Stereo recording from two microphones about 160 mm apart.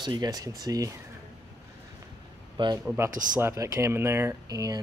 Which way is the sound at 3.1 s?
55° right (ahead or behind).